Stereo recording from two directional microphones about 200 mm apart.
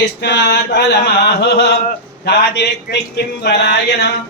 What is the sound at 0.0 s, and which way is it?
Chant, 60° left (ahead or behind).